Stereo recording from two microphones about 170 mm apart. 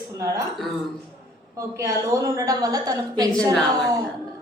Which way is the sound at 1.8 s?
15° right (ahead or behind).